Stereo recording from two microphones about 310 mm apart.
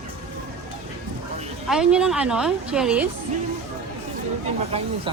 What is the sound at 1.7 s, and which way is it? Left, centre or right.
Speech, centre.